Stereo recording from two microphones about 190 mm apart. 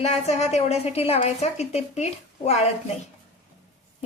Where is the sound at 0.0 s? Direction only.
35° left (ahead or behind).